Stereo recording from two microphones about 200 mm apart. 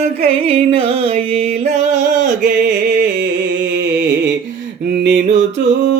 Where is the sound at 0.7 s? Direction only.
25° right (ahead or behind).